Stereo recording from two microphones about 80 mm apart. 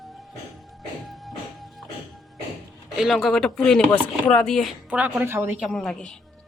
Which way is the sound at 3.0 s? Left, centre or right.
Centre.